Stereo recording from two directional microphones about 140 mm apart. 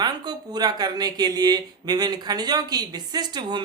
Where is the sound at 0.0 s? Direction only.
30° right (ahead or behind).